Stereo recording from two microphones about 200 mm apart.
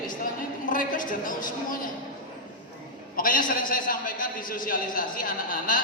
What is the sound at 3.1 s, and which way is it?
A man's voice, 45° left (ahead or behind).